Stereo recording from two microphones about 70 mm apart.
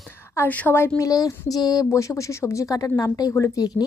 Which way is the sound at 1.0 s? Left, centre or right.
Left.